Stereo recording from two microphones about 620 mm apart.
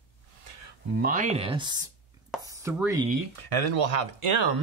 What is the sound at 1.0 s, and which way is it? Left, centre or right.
Speech, centre.